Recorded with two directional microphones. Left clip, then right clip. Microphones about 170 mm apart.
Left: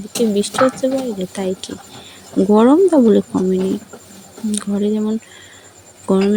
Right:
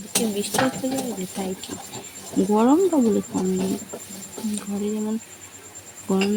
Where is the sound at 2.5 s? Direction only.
45° left (ahead or behind).